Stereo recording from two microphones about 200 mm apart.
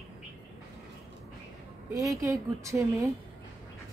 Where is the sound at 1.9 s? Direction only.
15° right (ahead or behind).